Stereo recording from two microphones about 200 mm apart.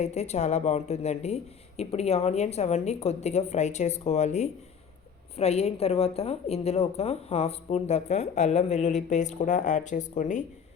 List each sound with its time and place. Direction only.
0.0 s a woman's voice: 35° left (ahead or behind)